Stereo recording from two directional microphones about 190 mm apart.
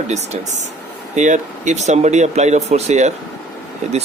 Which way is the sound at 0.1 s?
35° right (ahead or behind).